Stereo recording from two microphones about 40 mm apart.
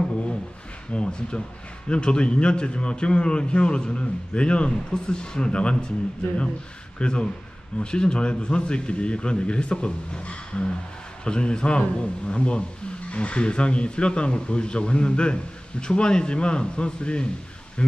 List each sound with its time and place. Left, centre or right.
0.0 s a sound: left
0.9 s speech: left
7.0 s speech: left